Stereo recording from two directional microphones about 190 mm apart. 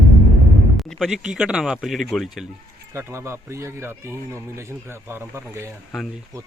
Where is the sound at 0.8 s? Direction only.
Centre (ahead or behind).